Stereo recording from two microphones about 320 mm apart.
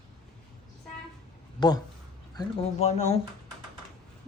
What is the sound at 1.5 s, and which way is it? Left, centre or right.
Speech, centre.